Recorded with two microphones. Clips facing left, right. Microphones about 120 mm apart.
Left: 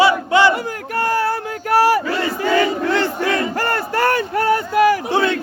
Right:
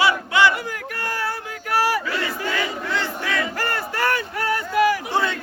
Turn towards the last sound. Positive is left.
turn(degrees=80)